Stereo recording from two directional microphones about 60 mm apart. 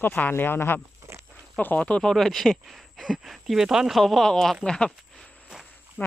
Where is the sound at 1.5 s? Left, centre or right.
Left.